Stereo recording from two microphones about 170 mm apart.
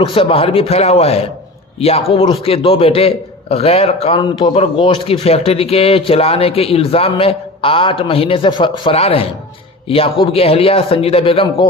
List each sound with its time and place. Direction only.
0.0 s speech: 35° left (ahead or behind)